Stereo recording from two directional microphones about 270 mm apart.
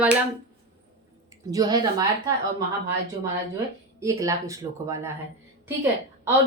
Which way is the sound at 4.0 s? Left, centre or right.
Centre.